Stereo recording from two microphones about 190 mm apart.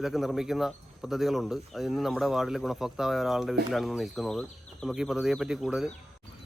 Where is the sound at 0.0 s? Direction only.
Centre (ahead or behind).